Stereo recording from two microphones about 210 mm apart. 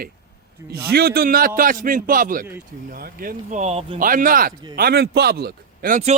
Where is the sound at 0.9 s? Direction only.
50° right (ahead or behind); by 4.0 s 30° right (ahead or behind).